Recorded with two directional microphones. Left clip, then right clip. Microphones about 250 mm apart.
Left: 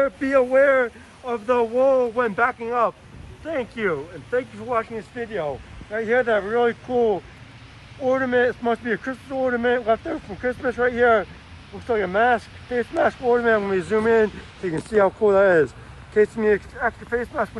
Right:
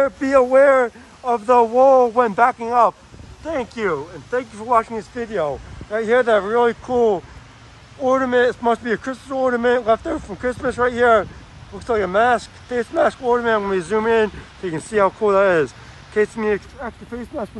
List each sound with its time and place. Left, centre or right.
0.0 s speech: centre